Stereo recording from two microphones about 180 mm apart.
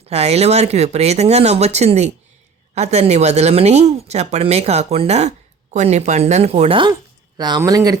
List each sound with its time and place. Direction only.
0.1 s speech: 35° right (ahead or behind); by 7.9 s 20° right (ahead or behind)